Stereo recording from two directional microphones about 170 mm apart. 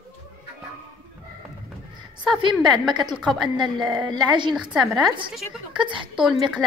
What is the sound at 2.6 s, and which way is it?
A woman's voice, 25° right (ahead or behind).